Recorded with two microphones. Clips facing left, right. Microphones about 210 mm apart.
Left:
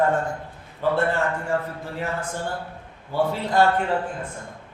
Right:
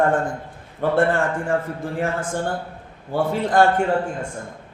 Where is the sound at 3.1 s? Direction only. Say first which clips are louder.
Right 3 dB; 50° right (ahead or behind).